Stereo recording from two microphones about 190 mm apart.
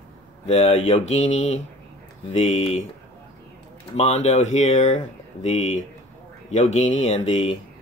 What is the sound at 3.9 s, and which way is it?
Speech, 35° left (ahead or behind).